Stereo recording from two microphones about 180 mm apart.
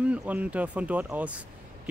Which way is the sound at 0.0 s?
5° right (ahead or behind).